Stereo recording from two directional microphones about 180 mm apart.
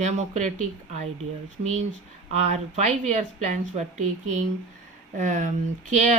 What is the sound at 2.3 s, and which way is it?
Speech, 40° right (ahead or behind).